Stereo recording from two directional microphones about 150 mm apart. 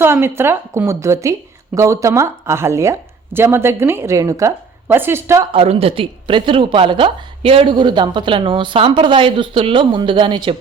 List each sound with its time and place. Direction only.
0.0 s a woman's voice: 15° right (ahead or behind)
5.5 s speech: 40° right (ahead or behind)